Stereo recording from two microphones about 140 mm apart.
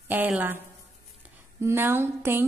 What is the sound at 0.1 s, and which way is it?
Speech, 15° right (ahead or behind).